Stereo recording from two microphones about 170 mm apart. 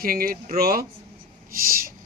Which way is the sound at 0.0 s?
60° right (ahead or behind).